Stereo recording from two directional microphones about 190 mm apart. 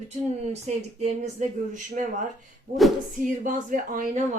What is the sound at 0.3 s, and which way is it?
Speech, 35° right (ahead or behind).